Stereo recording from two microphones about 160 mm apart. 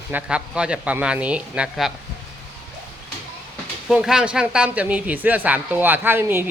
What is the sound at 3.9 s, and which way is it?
Speech, 5° right (ahead or behind).